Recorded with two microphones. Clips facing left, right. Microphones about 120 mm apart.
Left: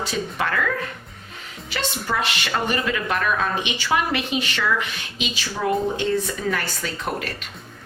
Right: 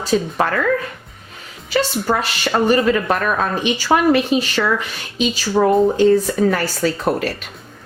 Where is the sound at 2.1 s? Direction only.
40° right (ahead or behind).